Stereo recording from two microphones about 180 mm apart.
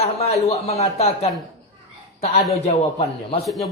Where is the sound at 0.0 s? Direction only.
35° left (ahead or behind).